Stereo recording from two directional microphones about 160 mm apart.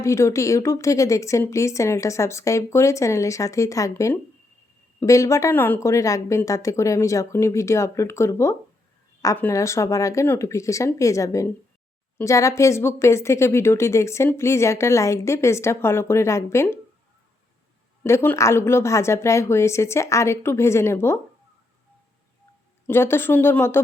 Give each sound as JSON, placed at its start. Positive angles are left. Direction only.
{"t": 0.0, "sound": "a woman's voice", "side_deg": 20}
{"t": 18.0, "sound": "a woman's voice", "side_deg": 15}
{"t": 22.9, "sound": "a woman's voice", "side_deg": 15}